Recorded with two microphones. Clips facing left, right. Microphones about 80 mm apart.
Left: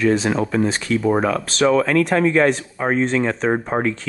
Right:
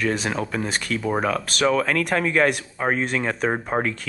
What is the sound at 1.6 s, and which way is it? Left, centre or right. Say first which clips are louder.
Speech: left 5 dB; left.